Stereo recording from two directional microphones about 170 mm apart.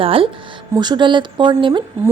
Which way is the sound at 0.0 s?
35° right (ahead or behind).